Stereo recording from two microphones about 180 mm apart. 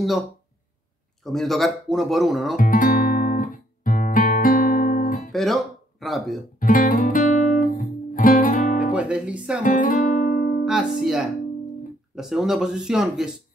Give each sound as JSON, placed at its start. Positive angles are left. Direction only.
{"t": 1.2, "sound": "speech", "side_deg": 0}
{"t": 2.5, "sound": "guitar", "side_deg": 50}
{"t": 5.3, "sound": "speech", "side_deg": 0}
{"t": 6.6, "sound": "guitar", "side_deg": 50}
{"t": 8.9, "sound": "speech", "side_deg": -5}
{"t": 9.6, "sound": "music", "side_deg": 50}
{"t": 10.6, "sound": "speech", "side_deg": -5}